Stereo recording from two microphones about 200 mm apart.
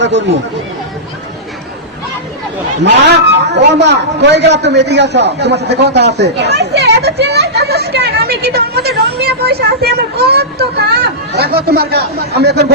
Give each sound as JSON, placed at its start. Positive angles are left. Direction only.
{"t": 0.0, "sound": "a man's voice", "side_deg": -60}
{"t": 2.8, "sound": "a man's voice", "side_deg": -60}